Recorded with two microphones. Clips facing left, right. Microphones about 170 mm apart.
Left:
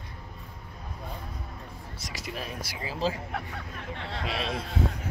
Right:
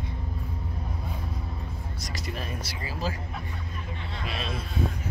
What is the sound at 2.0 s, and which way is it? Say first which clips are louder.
Speech: even; 5° left (ahead or behind).